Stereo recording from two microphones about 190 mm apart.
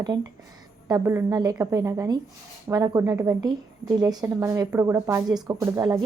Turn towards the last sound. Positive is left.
turn(degrees=-20)  # may be behind; listen again after turning